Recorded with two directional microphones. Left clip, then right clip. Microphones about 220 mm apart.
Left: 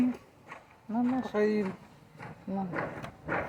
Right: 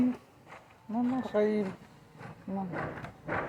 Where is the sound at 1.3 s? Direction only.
40° left (ahead or behind).